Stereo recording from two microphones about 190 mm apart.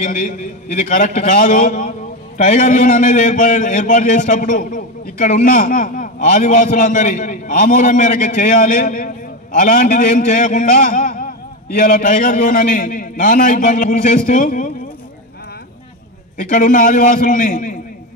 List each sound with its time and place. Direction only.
0.0 s a man's voice: 45° left (ahead or behind)
16.3 s a man's voice: 45° left (ahead or behind)